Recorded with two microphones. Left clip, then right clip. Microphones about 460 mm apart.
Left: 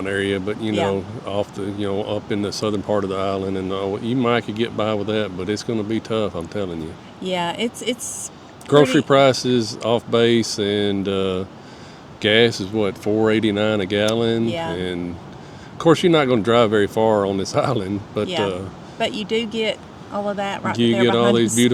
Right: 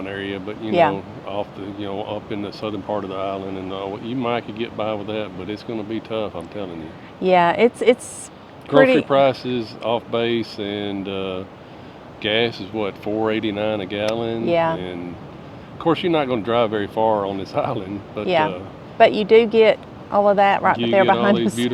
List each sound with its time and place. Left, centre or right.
0.0 s speech: left
7.3 s speech: right
8.7 s speech: left
14.5 s speech: centre
15.8 s speech: left
18.9 s speech: right
21.0 s speech: left